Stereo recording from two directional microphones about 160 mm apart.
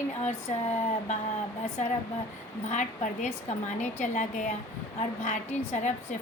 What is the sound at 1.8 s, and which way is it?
A woman's voice, 50° left (ahead or behind).